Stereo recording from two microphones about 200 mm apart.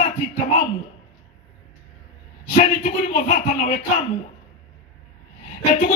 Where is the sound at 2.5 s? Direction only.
35° left (ahead or behind).